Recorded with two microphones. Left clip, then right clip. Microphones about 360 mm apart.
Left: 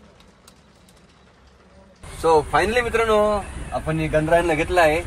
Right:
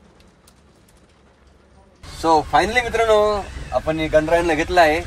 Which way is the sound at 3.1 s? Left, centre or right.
Right.